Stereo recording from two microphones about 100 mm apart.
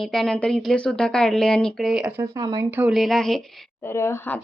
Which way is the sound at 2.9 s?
Centre (ahead or behind).